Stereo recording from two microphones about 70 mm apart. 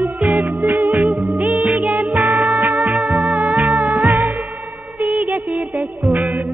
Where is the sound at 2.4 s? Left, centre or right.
Right.